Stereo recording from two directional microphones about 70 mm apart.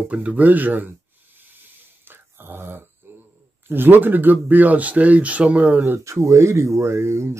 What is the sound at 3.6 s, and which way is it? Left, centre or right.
Speech, right.